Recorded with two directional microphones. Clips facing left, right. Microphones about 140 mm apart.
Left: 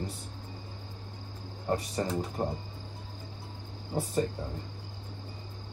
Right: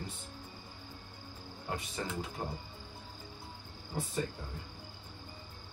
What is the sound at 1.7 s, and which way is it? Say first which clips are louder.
Speech: left 9 dB; 40° left (ahead or behind).